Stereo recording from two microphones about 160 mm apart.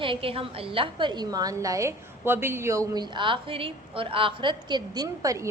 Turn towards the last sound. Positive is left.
turn(degrees=-20)  # may be behind; listen again after turning